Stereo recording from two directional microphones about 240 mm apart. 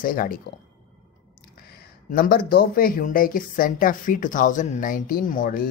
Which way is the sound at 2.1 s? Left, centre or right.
Left.